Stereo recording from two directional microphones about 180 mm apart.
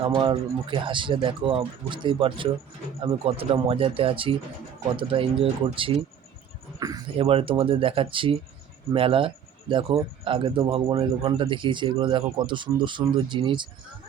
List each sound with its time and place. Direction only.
0.0 s speech: 25° right (ahead or behind)
6.7 s a sound: 20° right (ahead or behind)
7.2 s speech: 30° right (ahead or behind)